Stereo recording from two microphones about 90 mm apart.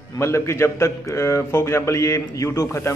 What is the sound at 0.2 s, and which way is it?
A man's voice, 30° left (ahead or behind).